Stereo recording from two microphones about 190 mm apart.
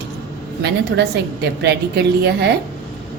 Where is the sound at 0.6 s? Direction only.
65° right (ahead or behind).